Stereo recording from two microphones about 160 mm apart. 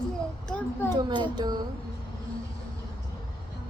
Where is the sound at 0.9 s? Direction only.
30° right (ahead or behind).